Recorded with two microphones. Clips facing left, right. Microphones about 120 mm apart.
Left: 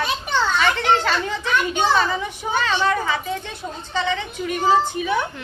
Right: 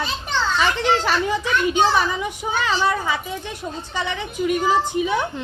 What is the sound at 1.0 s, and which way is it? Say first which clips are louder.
A child's voice: right 2 dB; 15° right (ahead or behind).